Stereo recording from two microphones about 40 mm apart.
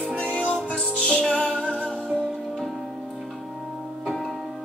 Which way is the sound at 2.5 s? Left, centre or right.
Centre.